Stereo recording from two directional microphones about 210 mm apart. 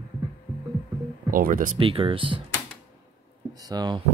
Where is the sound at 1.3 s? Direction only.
40° right (ahead or behind).